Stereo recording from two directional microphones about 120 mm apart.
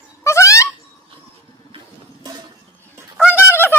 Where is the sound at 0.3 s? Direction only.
25° left (ahead or behind).